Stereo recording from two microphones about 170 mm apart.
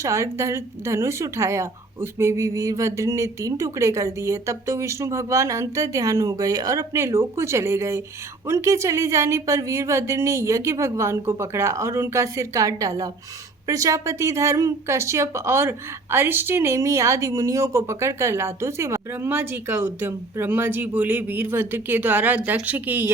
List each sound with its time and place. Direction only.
0.0 s speech: 15° right (ahead or behind)